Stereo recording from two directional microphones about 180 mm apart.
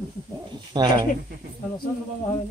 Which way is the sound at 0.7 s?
25° right (ahead or behind).